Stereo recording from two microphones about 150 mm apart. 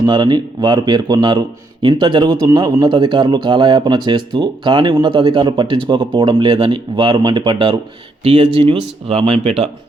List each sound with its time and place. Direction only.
0.0 s a man's voice: 30° right (ahead or behind)